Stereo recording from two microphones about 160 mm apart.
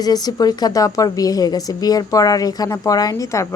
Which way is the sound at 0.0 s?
25° left (ahead or behind).